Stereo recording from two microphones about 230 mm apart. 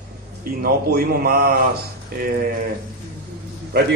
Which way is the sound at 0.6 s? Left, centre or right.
Right.